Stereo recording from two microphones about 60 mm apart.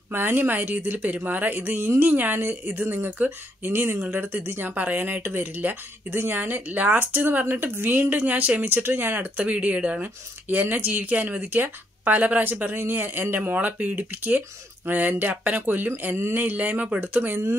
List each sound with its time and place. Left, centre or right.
0.1 s a woman's voice: right
9.4 s speech: right
10.5 s a woman's voice: right